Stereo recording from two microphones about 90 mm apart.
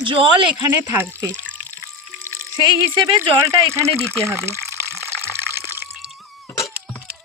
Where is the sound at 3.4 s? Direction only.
30° right (ahead or behind).